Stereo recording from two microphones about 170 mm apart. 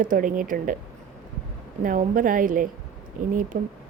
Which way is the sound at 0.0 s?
50° right (ahead or behind).